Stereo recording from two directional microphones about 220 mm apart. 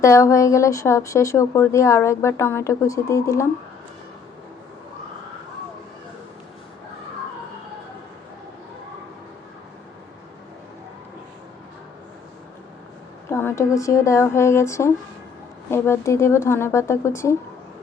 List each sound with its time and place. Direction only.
0.0 s speech: 15° left (ahead or behind)
13.3 s speech: 10° left (ahead or behind)